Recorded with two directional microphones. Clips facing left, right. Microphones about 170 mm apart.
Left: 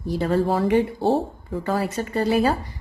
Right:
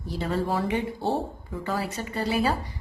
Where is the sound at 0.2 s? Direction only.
45° left (ahead or behind).